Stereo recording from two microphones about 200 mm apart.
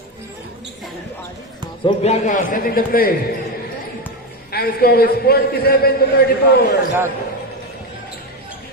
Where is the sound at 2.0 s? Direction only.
35° left (ahead or behind).